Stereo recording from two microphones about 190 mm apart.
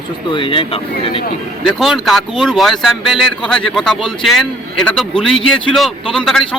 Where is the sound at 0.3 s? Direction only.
25° left (ahead or behind).